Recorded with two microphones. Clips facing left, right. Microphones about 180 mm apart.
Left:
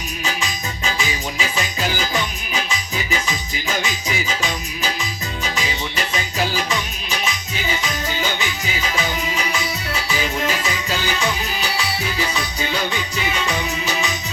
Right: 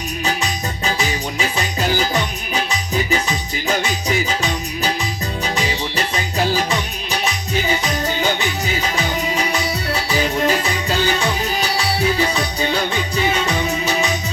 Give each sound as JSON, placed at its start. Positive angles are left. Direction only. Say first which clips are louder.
{"t": 0.3, "sound": "music", "louder": "right 4 dB", "side_deg": -40}
{"t": 7.7, "sound": "music", "louder": "right 1 dB", "side_deg": -35}
{"t": 12.3, "sound": "music", "louder": "right 4 dB", "side_deg": -35}